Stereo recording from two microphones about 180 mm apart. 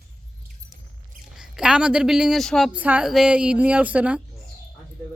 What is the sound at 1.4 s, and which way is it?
A woman's voice, 5° right (ahead or behind).